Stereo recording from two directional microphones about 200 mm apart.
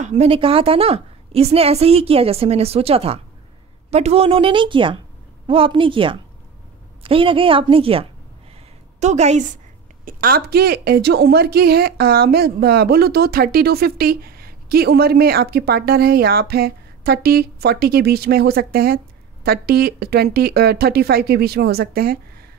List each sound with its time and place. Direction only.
0.0 s a woman's voice: 30° right (ahead or behind)
10.0 s a woman's voice: 45° right (ahead or behind)